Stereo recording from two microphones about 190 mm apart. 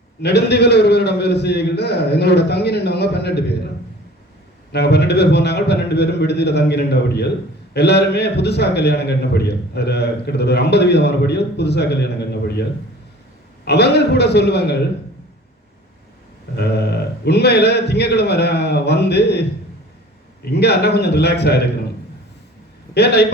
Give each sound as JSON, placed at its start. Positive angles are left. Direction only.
{"t": 0.2, "sound": "a man's voice", "side_deg": 60}
{"t": 4.7, "sound": "a man's voice", "side_deg": 60}
{"t": 13.7, "sound": "a man's voice", "side_deg": 60}
{"t": 16.6, "sound": "a man's voice", "side_deg": 60}
{"t": 23.0, "sound": "a man's voice", "side_deg": 60}